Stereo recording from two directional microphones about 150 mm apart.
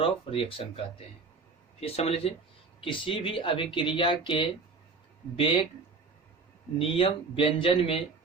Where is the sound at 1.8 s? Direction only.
45° left (ahead or behind).